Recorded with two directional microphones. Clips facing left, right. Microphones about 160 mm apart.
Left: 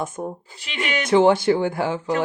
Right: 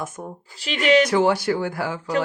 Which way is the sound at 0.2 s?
25° left (ahead or behind).